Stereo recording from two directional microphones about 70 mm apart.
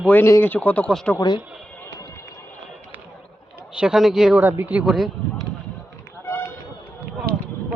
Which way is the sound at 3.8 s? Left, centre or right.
Centre.